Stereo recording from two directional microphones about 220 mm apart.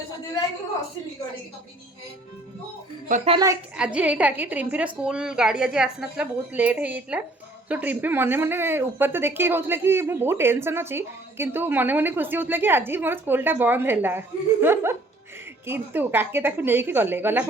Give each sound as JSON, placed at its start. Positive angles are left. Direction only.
{"t": 3.1, "sound": "a woman's voice", "side_deg": -25}
{"t": 3.4, "sound": "a woman's voice", "side_deg": -10}